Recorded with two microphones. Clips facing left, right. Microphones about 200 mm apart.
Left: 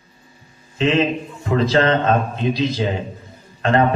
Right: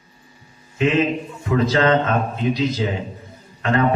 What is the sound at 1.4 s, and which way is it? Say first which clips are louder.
A man's voice: left 1 dB; 30° left (ahead or behind).